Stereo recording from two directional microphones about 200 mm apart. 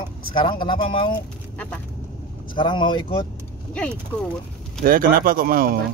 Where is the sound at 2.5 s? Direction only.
25° left (ahead or behind).